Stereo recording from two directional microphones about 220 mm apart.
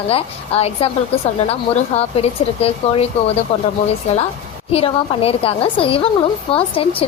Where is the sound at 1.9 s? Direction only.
30° left (ahead or behind).